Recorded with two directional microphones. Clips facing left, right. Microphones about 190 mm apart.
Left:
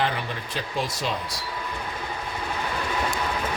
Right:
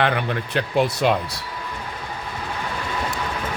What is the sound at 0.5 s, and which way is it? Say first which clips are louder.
Speech: right 9 dB; 65° right (ahead or behind).